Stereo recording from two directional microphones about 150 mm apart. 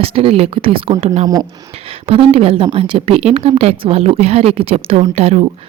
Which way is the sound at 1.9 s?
40° right (ahead or behind).